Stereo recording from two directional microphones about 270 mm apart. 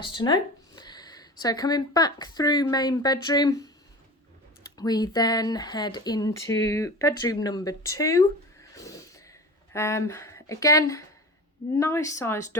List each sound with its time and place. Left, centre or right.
0.0 s speech: centre
4.8 s speech: centre
8.7 s a sound: centre
9.7 s speech: centre